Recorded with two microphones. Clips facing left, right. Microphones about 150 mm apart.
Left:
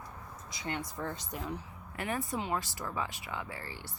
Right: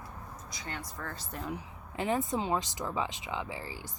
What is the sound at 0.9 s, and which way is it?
Speech, 20° left (ahead or behind).